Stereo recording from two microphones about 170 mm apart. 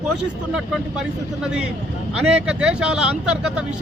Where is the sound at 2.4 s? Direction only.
5° right (ahead or behind).